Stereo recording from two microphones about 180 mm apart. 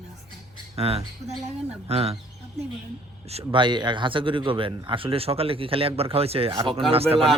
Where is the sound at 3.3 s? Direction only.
30° right (ahead or behind).